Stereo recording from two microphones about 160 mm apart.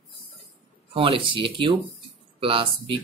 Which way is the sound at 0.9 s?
35° right (ahead or behind).